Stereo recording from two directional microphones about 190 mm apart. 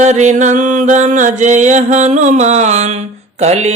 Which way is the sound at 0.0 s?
40° right (ahead or behind).